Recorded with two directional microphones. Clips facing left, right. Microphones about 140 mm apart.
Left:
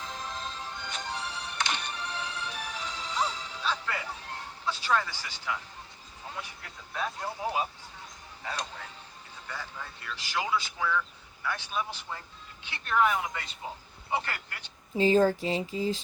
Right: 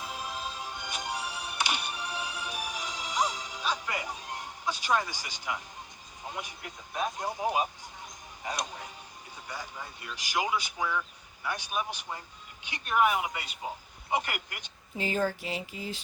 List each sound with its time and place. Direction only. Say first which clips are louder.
0.0 s music: right 1 dB; 10° right (ahead or behind)
6.2 s speech: right 2 dB; 15° right (ahead or behind)
14.9 s speech: left 7 dB; 30° left (ahead or behind)